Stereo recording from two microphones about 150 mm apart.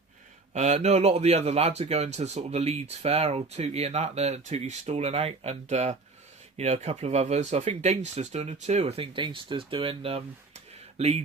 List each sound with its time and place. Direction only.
0.5 s speech: 45° right (ahead or behind)